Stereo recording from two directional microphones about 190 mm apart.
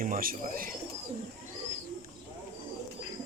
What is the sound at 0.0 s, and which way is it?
Speech, 45° right (ahead or behind).